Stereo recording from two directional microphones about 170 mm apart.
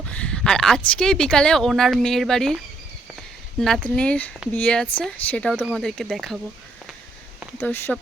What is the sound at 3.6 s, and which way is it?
Speech, 5° left (ahead or behind).